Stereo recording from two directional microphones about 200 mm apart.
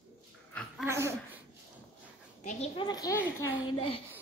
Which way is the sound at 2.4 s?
40° left (ahead or behind).